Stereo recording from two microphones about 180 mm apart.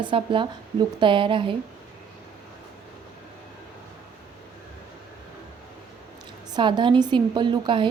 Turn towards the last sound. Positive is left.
turn(degrees=-25)  # may be behind; listen again after turning